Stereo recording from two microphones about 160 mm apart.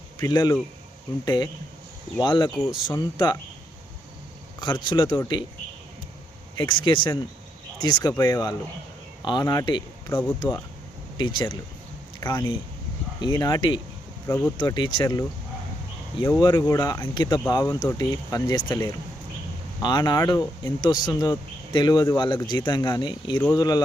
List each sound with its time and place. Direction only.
0.2 s speech: 25° left (ahead or behind)
2.5 s speech: 5° right (ahead or behind)
2.9 s speech: 25° left (ahead or behind)
4.6 s speech: 30° left (ahead or behind)
6.6 s speech: 30° left (ahead or behind)
10.1 s speech: 10° left (ahead or behind)
11.2 s speech: 30° left (ahead or behind)
13.2 s speech: 25° left (ahead or behind)
14.3 s speech: 15° left (ahead or behind)
14.6 s speech: 30° left (ahead or behind)
16.4 s speech: 25° left (ahead or behind)
20.2 s speech: 15° left (ahead or behind)
20.8 s speech: 30° left (ahead or behind)